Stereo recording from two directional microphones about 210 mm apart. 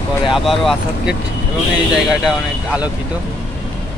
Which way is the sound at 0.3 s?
Centre (ahead or behind).